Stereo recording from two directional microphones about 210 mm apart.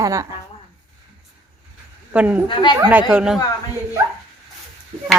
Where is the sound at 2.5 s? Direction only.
20° left (ahead or behind).